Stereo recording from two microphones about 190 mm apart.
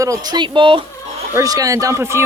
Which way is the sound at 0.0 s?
20° right (ahead or behind).